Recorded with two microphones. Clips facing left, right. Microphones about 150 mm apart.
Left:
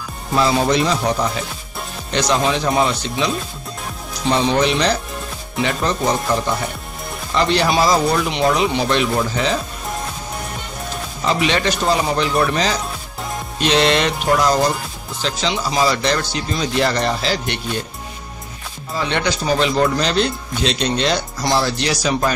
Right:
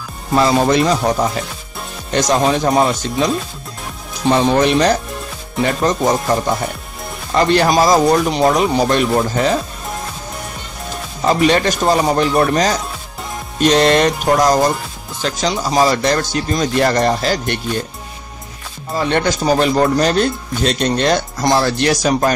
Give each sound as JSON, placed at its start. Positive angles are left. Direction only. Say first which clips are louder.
{"t": 0.4, "sound": "speech", "louder": "right 3 dB", "side_deg": -50}
{"t": 2.0, "sound": "speech", "louder": "right 3 dB", "side_deg": -45}
{"t": 4.3, "sound": "speech", "louder": "right 4 dB", "side_deg": -50}
{"t": 7.3, "sound": "speech", "louder": "right 4 dB", "side_deg": -45}
{"t": 11.2, "sound": "speech", "louder": "right 5 dB", "side_deg": -45}
{"t": 18.9, "sound": "speech", "louder": "right 4 dB", "side_deg": -45}